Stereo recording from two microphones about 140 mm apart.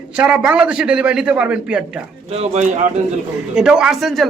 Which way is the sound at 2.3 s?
50° right (ahead or behind).